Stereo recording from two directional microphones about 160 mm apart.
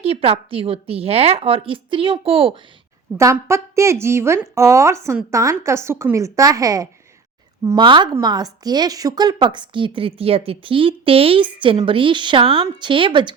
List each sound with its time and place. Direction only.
0.0 s speech: 35° right (ahead or behind)
3.2 s a woman's voice: 15° right (ahead or behind)